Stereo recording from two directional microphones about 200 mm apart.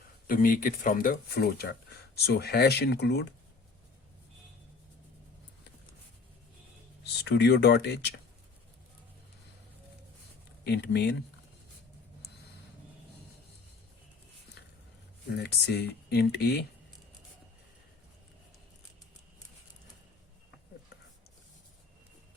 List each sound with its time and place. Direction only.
0.3 s speech: 45° left (ahead or behind)
7.2 s speech: 55° left (ahead or behind)
10.6 s speech: 55° left (ahead or behind)
15.4 s speech: 55° left (ahead or behind)